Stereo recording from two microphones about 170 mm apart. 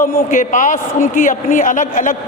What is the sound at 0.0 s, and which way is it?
A man's voice, 50° left (ahead or behind).